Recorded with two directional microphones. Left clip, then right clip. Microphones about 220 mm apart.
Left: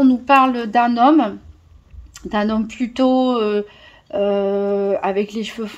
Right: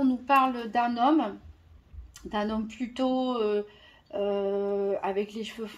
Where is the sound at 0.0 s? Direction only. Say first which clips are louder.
Left 10 dB; 45° left (ahead or behind).